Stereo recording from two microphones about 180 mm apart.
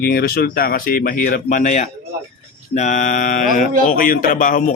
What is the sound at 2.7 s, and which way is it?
Mantra, 45° left (ahead or behind).